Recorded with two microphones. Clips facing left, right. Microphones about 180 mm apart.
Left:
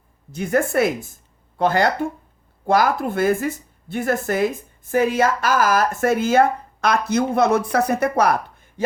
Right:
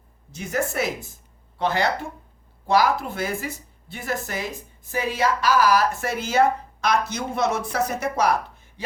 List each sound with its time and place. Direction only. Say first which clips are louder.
0.3 s speech: left 7 dB; 55° left (ahead or behind)